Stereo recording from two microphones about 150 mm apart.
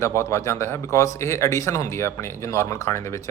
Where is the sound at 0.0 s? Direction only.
20° left (ahead or behind).